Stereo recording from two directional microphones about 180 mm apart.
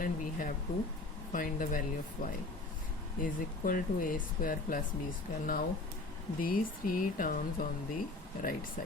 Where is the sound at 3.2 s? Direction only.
50° left (ahead or behind).